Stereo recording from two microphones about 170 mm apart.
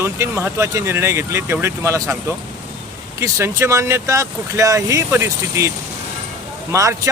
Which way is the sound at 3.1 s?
15° right (ahead or behind).